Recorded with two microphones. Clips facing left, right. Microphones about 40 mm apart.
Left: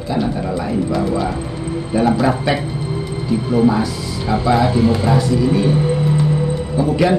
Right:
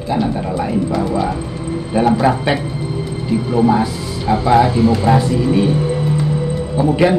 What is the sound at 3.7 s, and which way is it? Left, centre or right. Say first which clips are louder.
Speech: right 2 dB; right.